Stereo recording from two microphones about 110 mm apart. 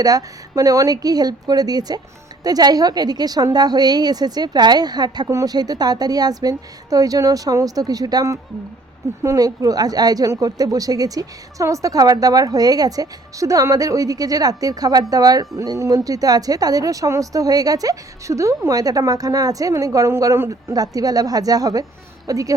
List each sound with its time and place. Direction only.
0.0 s speech: 35° right (ahead or behind)